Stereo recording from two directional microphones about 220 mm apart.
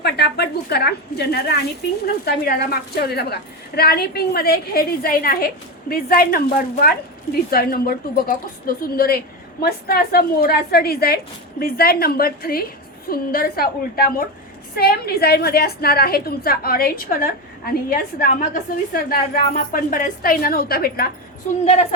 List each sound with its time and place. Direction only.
0.0 s a sound: 50° left (ahead or behind)
2.2 s a woman's voice: 45° left (ahead or behind)
21.6 s a woman's voice: 30° left (ahead or behind)